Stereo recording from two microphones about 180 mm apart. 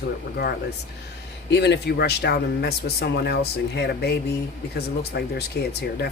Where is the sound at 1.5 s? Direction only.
70° left (ahead or behind).